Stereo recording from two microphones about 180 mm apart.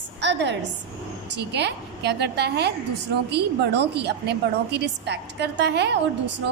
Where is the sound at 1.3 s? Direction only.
70° right (ahead or behind).